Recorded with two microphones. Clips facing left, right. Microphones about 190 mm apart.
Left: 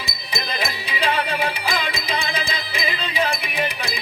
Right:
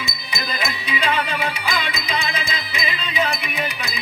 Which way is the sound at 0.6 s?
30° left (ahead or behind).